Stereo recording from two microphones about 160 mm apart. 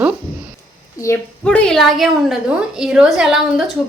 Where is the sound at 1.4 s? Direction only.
5° left (ahead or behind).